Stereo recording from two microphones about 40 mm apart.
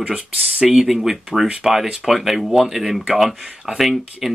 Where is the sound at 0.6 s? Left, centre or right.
Centre.